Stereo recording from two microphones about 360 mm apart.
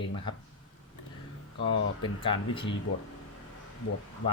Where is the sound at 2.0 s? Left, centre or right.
Centre.